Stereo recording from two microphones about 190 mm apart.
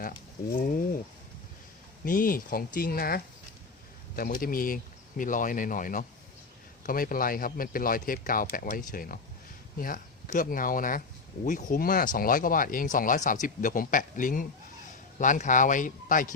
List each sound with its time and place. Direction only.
2.0 s speech: 50° left (ahead or behind)